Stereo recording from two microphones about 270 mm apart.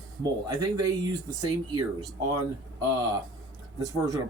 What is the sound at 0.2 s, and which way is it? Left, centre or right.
Speech, centre.